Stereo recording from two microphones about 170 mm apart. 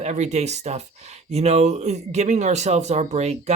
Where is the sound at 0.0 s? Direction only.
40° right (ahead or behind).